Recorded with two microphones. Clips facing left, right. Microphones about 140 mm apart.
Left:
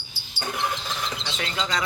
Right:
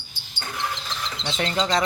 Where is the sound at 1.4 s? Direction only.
40° right (ahead or behind).